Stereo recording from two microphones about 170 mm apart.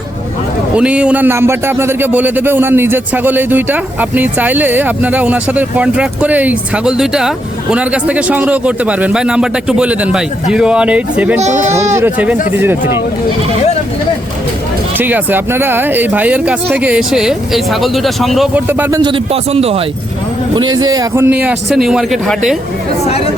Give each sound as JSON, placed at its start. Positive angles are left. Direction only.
{"t": 0.8, "sound": "speech", "side_deg": -5}
{"t": 11.3, "sound": "a man's voice", "side_deg": -40}
{"t": 11.8, "sound": "speech", "side_deg": -15}
{"t": 14.9, "sound": "speech", "side_deg": -10}
{"t": 18.7, "sound": "speech", "side_deg": -15}
{"t": 19.1, "sound": "a man's voice", "side_deg": -35}
{"t": 20.6, "sound": "speech", "side_deg": -25}
{"t": 21.2, "sound": "speech", "side_deg": -10}
{"t": 23.0, "sound": "speech", "side_deg": 35}